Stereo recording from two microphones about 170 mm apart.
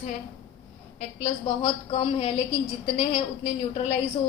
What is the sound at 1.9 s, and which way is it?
A woman's voice, 35° left (ahead or behind).